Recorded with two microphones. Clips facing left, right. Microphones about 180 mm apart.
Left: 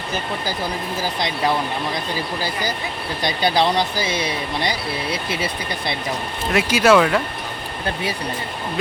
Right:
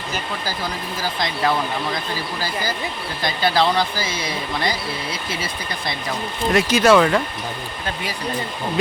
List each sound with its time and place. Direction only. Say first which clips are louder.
3.2 s speech: even; 15° left (ahead or behind)
6.5 s speech: even; 5° left (ahead or behind)